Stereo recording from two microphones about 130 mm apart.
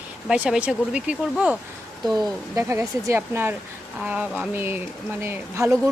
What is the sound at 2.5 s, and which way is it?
Speech, 20° right (ahead or behind).